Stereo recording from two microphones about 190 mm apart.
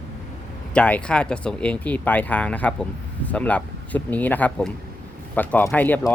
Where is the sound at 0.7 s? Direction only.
5° left (ahead or behind).